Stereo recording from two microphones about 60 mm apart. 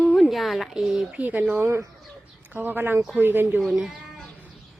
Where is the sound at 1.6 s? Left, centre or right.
Right.